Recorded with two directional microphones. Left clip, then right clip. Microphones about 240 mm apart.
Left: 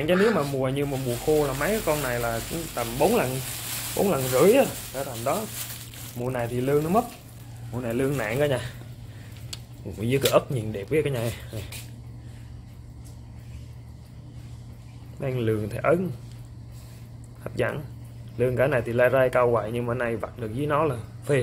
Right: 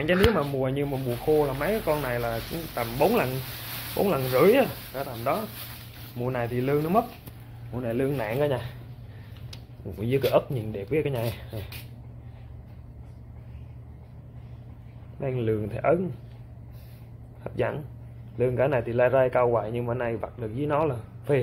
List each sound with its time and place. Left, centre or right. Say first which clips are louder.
0.0 s speech: left 1 dB; centre
9.9 s speech: left 1 dB; centre
15.1 s speech: left 1 dB; centre
17.4 s speech: left 1 dB; centre